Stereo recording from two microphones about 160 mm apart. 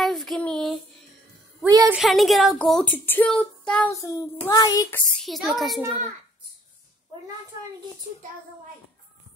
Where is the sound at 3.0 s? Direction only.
10° left (ahead or behind).